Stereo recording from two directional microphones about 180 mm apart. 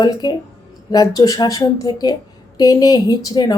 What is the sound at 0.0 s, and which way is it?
A woman's voice, 20° left (ahead or behind).